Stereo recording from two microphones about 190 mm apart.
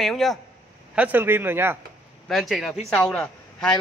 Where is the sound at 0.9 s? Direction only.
10° right (ahead or behind).